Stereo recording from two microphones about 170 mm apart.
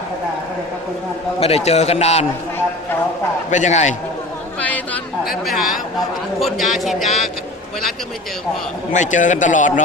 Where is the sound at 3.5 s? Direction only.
45° left (ahead or behind).